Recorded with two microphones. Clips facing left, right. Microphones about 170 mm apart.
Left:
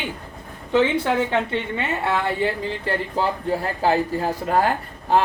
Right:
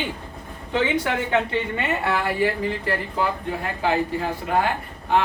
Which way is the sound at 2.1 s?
25° left (ahead or behind).